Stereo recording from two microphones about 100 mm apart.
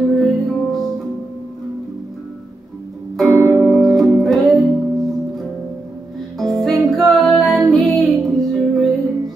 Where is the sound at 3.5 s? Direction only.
10° left (ahead or behind).